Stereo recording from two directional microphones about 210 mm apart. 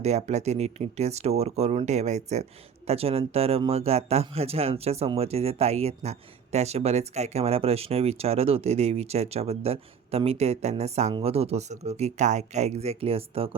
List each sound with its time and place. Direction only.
0.0 s speech: 30° right (ahead or behind)